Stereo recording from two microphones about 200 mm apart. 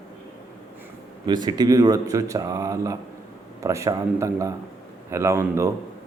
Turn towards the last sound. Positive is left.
turn(degrees=-15)  # may be behind; listen again after turning